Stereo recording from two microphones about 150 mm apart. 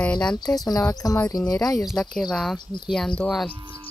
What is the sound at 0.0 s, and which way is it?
Speech, 5° left (ahead or behind).